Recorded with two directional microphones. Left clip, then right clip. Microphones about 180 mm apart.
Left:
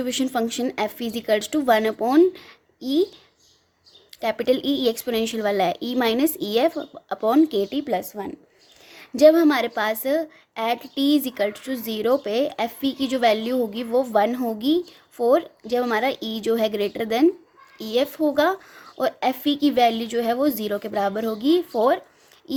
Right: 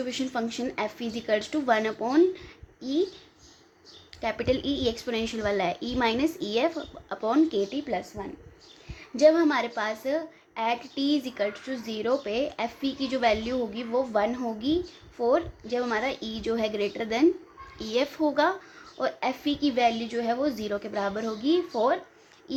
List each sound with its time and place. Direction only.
0.0 s a woman's voice: 45° left (ahead or behind)
4.2 s a woman's voice: 40° left (ahead or behind)
22.5 s babbling: 45° left (ahead or behind)